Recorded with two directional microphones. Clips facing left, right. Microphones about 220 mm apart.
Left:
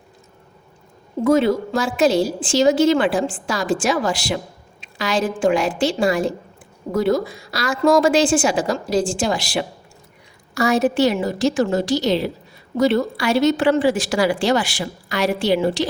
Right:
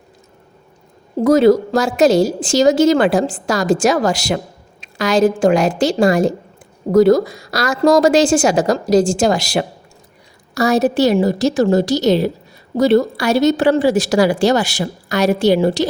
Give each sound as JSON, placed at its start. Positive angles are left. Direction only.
{"t": 1.2, "sound": "a woman's voice", "side_deg": -40}